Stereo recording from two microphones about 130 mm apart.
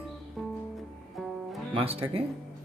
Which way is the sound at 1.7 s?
45° right (ahead or behind).